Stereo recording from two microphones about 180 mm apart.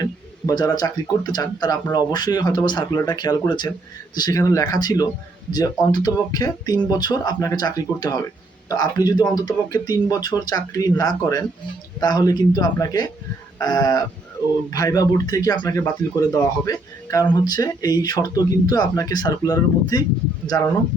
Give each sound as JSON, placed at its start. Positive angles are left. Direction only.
{"t": 0.0, "sound": "speech", "side_deg": 20}